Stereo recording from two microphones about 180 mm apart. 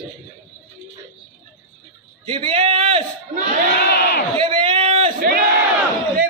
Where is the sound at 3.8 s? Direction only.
60° left (ahead or behind).